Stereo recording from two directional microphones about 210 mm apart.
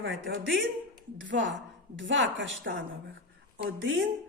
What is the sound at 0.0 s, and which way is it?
A woman's voice, 65° right (ahead or behind).